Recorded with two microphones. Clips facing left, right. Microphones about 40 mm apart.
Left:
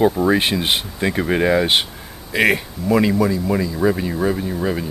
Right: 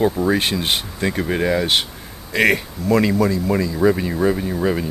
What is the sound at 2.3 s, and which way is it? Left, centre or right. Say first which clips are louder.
Speech: even; centre.